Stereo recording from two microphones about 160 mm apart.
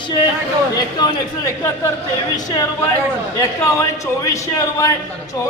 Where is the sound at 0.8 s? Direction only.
25° left (ahead or behind).